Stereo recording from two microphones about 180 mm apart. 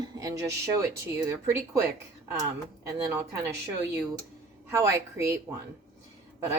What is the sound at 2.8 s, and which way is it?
Speech, 15° right (ahead or behind).